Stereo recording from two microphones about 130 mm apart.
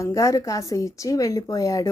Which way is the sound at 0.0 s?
25° left (ahead or behind).